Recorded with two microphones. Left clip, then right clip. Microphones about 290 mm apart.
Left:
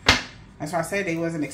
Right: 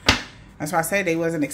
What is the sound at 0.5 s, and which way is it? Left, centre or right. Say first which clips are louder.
Speech: right 4 dB; right.